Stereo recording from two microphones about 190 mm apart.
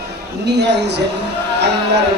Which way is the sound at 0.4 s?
65° right (ahead or behind).